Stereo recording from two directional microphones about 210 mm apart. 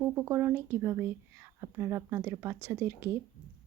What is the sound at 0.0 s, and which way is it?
Speech, 10° right (ahead or behind).